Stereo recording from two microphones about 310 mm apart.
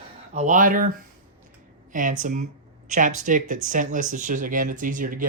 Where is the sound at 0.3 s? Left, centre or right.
Right.